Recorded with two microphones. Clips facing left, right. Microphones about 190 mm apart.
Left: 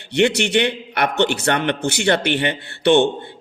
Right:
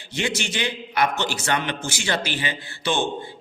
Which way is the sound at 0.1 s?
65° left (ahead or behind).